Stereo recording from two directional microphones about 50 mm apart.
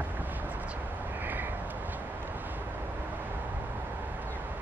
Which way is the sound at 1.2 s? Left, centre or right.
Right.